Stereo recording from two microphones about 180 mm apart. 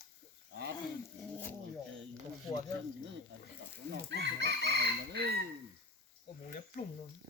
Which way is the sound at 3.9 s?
75° right (ahead or behind).